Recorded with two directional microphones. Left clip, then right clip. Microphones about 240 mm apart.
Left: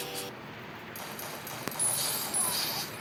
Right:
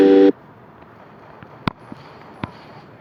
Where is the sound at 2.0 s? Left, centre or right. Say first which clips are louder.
Right 1 dB; left.